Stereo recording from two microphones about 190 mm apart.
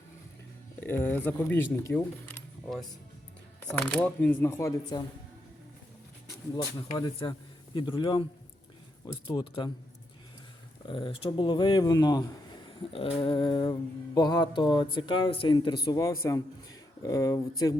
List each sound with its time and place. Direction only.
0.8 s speech: 10° left (ahead or behind)
6.7 s speech: 25° left (ahead or behind)
10.8 s speech: 25° left (ahead or behind)